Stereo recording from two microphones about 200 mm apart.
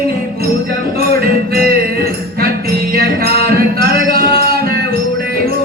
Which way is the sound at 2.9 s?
50° right (ahead or behind).